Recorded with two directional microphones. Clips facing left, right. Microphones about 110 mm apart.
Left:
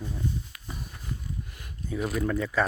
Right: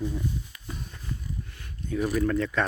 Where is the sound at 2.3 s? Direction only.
5° left (ahead or behind).